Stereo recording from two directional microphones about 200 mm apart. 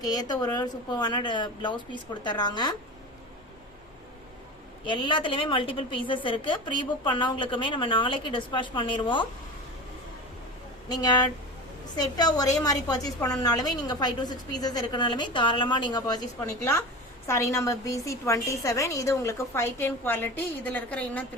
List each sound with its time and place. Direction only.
0.0 s a woman's voice: 20° left (ahead or behind)
4.9 s a woman's voice: 25° left (ahead or behind)
10.8 s a woman's voice: 20° left (ahead or behind)